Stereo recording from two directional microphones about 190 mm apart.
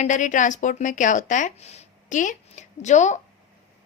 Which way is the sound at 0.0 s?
40° left (ahead or behind).